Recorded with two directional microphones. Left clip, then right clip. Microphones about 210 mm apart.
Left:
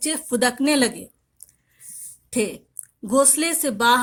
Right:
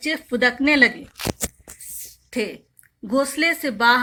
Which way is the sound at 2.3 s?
55° left (ahead or behind).